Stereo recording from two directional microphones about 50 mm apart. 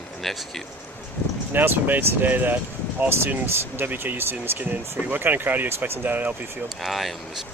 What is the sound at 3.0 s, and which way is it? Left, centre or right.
Speech, right.